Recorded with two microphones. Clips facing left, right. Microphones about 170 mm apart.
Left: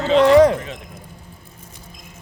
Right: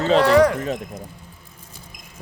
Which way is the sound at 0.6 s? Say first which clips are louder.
Right 6 dB; 40° right (ahead or behind).